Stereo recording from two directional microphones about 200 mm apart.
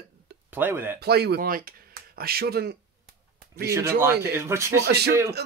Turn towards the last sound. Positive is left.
turn(degrees=-55)  # may be behind; listen again after turning